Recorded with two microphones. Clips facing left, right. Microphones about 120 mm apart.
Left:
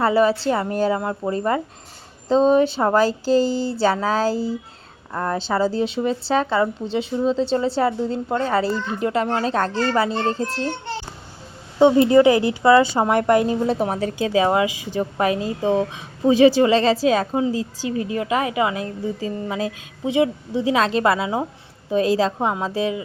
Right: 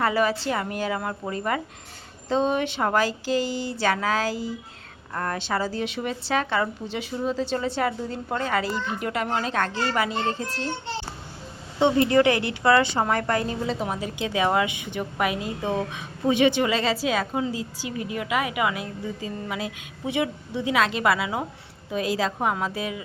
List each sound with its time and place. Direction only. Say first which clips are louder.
0.0 s a woman's voice: left 6 dB; 30° left (ahead or behind)
5.1 s a woman's voice: left 5 dB; 20° left (ahead or behind)
11.9 s a woman's voice: left 6 dB; 25° left (ahead or behind)
13.7 s a woman's voice: left 6 dB; 50° left (ahead or behind)
22.4 s a woman's voice: left 4 dB; 25° left (ahead or behind)